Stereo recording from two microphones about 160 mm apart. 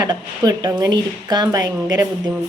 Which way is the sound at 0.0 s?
25° right (ahead or behind).